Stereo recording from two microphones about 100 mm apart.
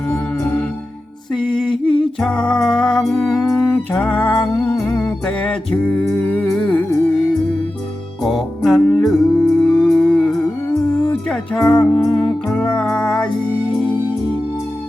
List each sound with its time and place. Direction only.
0.1 s music: 10° left (ahead or behind)
1.3 s a sound: 5° left (ahead or behind)
3.5 s music: 15° left (ahead or behind)
8.2 s music: centre (ahead or behind)